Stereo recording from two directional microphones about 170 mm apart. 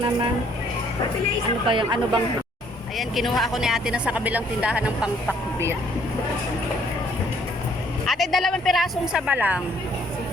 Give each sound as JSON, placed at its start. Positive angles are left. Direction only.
{"t": 1.6, "sound": "speech", "side_deg": -30}
{"t": 3.0, "sound": "speech", "side_deg": 0}
{"t": 8.0, "sound": "speech", "side_deg": 0}